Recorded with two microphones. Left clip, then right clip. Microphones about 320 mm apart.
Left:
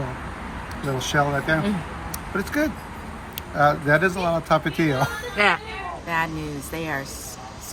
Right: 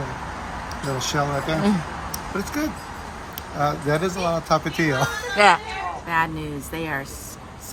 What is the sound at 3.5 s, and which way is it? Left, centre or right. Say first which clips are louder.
Speech: left 4 dB; centre.